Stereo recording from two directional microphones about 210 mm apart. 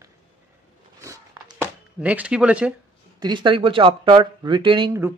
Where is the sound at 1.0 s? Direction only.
15° right (ahead or behind).